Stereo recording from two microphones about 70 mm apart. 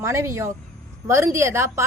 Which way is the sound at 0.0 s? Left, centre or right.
Right.